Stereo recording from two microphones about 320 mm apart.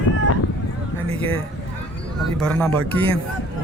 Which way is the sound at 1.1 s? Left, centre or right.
Centre.